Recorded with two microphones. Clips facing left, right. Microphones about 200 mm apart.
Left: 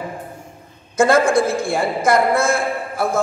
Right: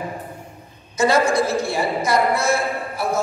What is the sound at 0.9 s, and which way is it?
A woman's voice, 50° left (ahead or behind).